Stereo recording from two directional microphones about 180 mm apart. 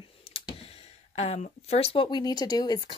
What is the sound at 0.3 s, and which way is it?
Clicking, 30° left (ahead or behind).